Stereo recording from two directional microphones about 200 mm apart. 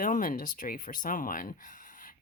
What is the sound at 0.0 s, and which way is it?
Speech, 40° left (ahead or behind).